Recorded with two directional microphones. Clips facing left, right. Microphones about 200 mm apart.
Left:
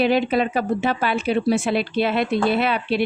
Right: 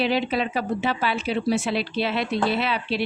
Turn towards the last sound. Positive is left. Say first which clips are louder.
# left 4 dB
turn(degrees=55)  # may be behind; listen again after turning